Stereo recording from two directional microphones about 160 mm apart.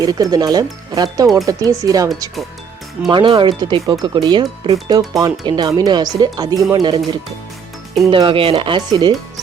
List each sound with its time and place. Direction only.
0.0 s speech: 25° right (ahead or behind)
3.1 s speech: 30° right (ahead or behind)
8.1 s speech: 35° right (ahead or behind)